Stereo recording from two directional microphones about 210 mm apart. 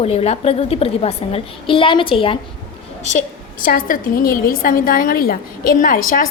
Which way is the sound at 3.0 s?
35° left (ahead or behind).